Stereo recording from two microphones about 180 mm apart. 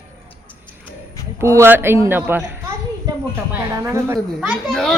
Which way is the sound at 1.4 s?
15° right (ahead or behind).